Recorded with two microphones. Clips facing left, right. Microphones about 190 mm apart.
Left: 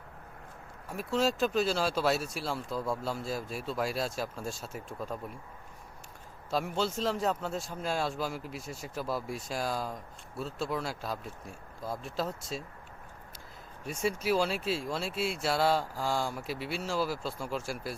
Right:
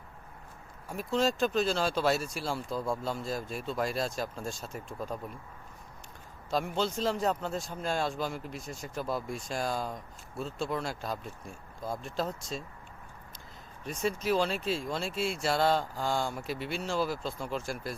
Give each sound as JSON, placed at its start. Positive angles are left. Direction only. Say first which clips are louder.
{"t": 0.9, "sound": "a man's voice", "louder": "even", "side_deg": 5}
{"t": 6.5, "sound": "a man's voice", "louder": "right 1 dB", "side_deg": 5}
{"t": 13.8, "sound": "a man's voice", "louder": "even", "side_deg": 10}